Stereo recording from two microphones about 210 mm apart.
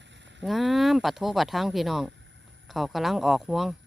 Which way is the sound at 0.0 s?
60° right (ahead or behind).